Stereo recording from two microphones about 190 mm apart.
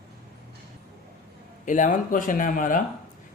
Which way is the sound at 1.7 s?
40° left (ahead or behind).